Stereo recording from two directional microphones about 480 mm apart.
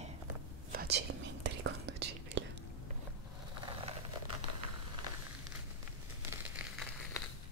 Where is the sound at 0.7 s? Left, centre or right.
Centre.